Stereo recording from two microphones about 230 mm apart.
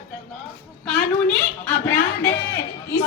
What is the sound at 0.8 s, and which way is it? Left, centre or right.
Speech, centre.